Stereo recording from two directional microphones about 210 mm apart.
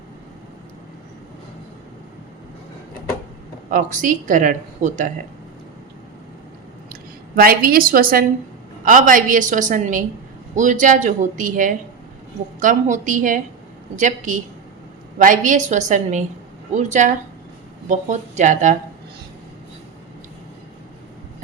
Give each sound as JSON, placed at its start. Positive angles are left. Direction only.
{"t": 3.7, "sound": "speech", "side_deg": -40}
{"t": 7.3, "sound": "a woman's voice", "side_deg": -45}